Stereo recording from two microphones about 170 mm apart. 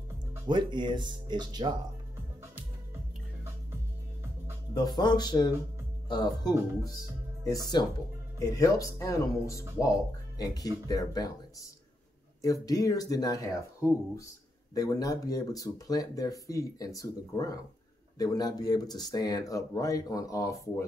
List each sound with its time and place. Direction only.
0.5 s speech: 25° right (ahead or behind)
4.7 s speech: 25° left (ahead or behind)
12.6 s speech: 20° left (ahead or behind)